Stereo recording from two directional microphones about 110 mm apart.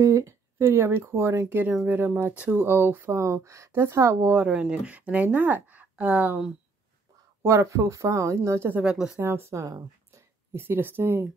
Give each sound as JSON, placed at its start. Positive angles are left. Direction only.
{"t": 0.0, "sound": "speech", "side_deg": -25}
{"t": 4.4, "sound": "speech", "side_deg": -10}
{"t": 7.4, "sound": "speech", "side_deg": -25}
{"t": 9.2, "sound": "speech", "side_deg": -20}